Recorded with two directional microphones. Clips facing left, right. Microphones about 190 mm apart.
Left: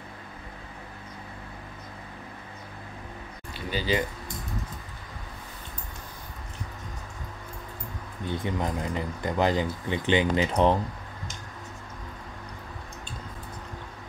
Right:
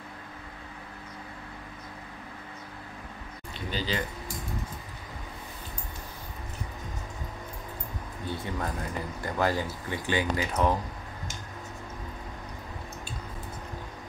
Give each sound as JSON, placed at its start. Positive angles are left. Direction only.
{"t": 3.7, "sound": "speech", "side_deg": 15}
{"t": 8.3, "sound": "speech", "side_deg": 20}